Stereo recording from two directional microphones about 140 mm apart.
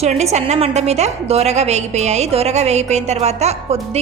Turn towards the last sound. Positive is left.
turn(degrees=-50)  # may be behind; listen again after turning